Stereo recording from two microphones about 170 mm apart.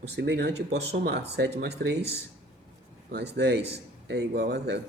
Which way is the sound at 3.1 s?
75° right (ahead or behind).